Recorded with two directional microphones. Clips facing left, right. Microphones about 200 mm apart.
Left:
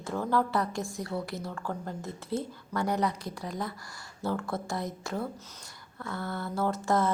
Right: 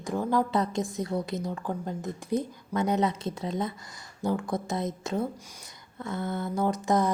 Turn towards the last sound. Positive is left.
turn(degrees=-15)  # may be behind; listen again after turning